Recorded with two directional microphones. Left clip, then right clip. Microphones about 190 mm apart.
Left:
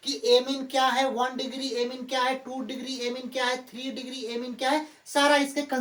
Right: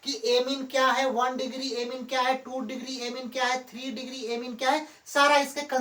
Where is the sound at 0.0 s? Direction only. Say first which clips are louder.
Left 3 dB; 20° left (ahead or behind).